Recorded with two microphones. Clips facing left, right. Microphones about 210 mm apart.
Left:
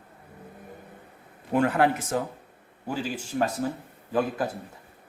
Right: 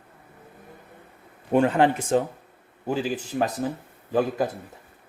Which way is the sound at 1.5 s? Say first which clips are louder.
Right 3 dB; 25° right (ahead or behind).